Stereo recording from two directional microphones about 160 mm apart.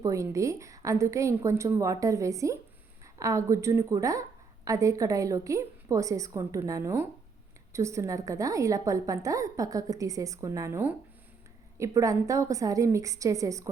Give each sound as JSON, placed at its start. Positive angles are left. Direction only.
{"t": 0.0, "sound": "a woman's voice", "side_deg": -20}